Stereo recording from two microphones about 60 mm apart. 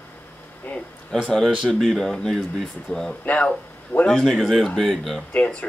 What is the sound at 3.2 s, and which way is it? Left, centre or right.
Speech, left.